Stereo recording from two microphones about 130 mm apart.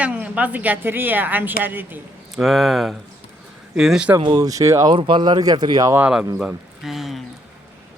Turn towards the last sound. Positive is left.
turn(degrees=0)  # may be behind; listen again after turning